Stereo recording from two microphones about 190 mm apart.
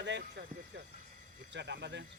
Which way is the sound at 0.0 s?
65° right (ahead or behind).